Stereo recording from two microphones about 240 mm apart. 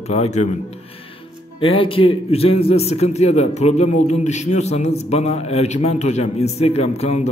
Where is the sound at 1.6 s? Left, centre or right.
Left.